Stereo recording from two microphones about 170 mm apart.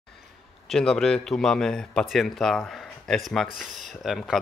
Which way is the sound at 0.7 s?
5° left (ahead or behind).